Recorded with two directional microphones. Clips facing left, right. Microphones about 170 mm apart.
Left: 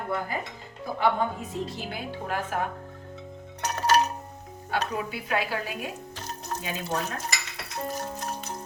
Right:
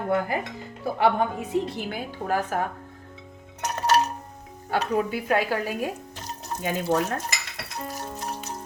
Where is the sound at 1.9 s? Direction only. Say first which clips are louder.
Right 7 dB; 40° right (ahead or behind).